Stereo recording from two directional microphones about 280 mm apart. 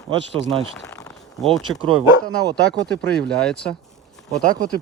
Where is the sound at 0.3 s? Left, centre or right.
Right.